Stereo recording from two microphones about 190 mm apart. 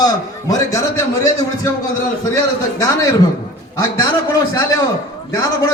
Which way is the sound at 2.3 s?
15° left (ahead or behind).